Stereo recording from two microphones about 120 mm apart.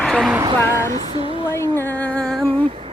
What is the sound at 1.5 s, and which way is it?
Music, 20° left (ahead or behind).